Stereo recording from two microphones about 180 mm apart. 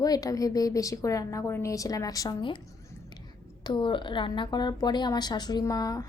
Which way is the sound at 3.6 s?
25° left (ahead or behind).